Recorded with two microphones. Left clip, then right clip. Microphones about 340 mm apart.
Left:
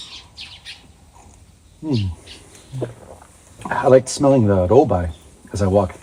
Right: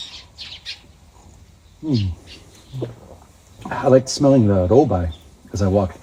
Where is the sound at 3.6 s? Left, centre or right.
Left.